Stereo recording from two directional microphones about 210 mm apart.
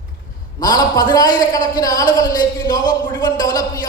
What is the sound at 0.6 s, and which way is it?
A woman's voice, 20° left (ahead or behind).